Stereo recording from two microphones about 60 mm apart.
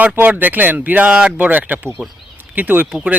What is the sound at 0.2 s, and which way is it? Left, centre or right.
Speech, right.